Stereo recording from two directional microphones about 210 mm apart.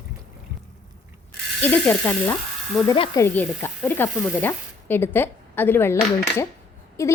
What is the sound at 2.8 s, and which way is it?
Speech, 20° left (ahead or behind).